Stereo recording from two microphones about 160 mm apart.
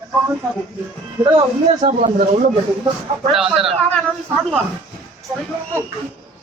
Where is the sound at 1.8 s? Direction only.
50° right (ahead or behind).